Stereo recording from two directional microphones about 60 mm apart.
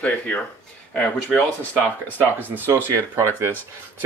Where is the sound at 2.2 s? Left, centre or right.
Right.